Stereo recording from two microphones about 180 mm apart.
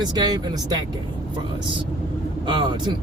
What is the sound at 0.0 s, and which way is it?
Speech, 20° right (ahead or behind).